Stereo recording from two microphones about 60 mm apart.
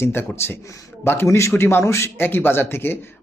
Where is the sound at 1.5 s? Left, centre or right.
Left.